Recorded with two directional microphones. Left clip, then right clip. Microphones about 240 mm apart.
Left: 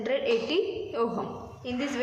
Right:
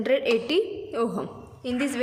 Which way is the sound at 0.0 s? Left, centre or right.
Right.